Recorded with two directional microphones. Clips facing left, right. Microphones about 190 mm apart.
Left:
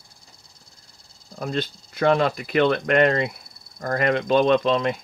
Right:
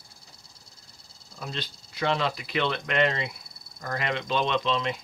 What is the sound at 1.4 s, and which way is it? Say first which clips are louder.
Speech: left 10 dB; 50° left (ahead or behind).